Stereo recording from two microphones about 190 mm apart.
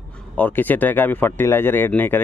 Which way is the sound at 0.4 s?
10° left (ahead or behind).